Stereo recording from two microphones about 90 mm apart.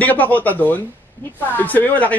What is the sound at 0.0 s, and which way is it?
Speech, 20° left (ahead or behind).